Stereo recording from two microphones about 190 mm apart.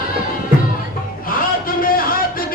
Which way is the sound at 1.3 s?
50° left (ahead or behind).